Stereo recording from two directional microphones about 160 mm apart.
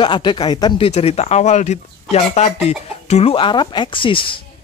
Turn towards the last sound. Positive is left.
turn(degrees=30)  # may be behind; listen again after turning